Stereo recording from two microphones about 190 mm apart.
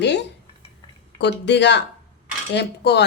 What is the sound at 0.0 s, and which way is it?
Dishes, 65° left (ahead or behind).